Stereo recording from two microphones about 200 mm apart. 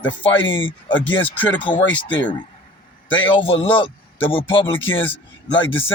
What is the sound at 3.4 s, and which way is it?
A man's voice, 25° left (ahead or behind).